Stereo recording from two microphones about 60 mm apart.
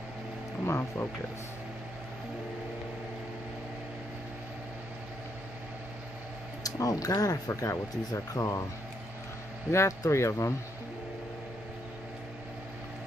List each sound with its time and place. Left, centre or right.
0.7 s speech: left
6.6 s speech: left
9.7 s speech: left